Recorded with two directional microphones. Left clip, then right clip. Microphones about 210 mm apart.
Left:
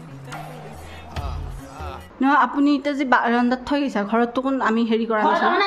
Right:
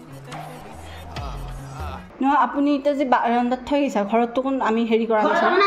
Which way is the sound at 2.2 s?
20° left (ahead or behind).